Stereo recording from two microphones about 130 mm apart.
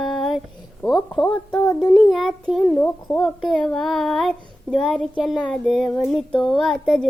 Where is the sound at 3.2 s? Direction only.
5° left (ahead or behind).